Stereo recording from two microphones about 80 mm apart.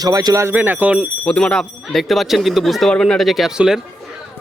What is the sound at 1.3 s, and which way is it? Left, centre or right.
Speech, centre.